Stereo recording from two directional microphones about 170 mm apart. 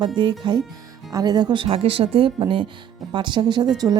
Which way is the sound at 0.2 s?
25° right (ahead or behind).